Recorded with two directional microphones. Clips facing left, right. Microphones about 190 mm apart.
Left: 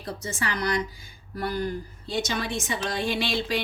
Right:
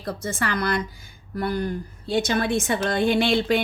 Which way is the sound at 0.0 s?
60° right (ahead or behind).